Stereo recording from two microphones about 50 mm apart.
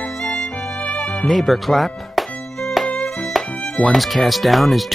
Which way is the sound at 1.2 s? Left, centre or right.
Centre.